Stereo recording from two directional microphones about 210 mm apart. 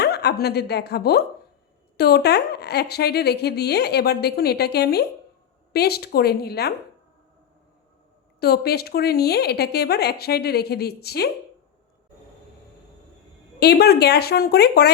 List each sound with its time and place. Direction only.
0.0 s a woman's voice: 50° left (ahead or behind)
8.4 s a woman's voice: 50° left (ahead or behind)
13.6 s a woman's voice: 50° left (ahead or behind)